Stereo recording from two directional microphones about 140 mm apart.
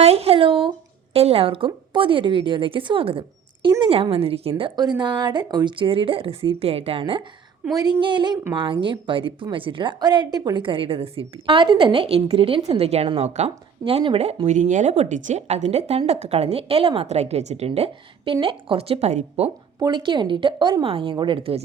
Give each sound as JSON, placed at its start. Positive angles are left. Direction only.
{"t": 0.0, "sound": "a sound", "side_deg": -45}
{"t": 1.1, "sound": "a woman's voice", "side_deg": -45}
{"t": 4.8, "sound": "a woman's voice", "side_deg": -30}
{"t": 7.0, "sound": "a woman's voice", "side_deg": -35}
{"t": 19.8, "sound": "a woman's voice", "side_deg": -35}